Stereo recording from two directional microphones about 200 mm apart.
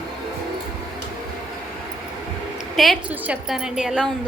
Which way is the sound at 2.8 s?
5° right (ahead or behind).